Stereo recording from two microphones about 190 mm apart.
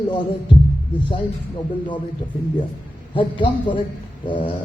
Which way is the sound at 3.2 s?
25° left (ahead or behind).